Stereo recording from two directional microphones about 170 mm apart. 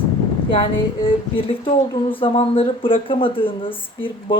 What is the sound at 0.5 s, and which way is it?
Speech, 30° left (ahead or behind).